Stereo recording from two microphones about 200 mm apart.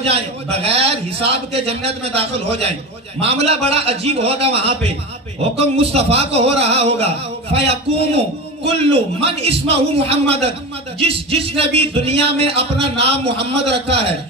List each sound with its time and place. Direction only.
0.0 s speech: 30° right (ahead or behind)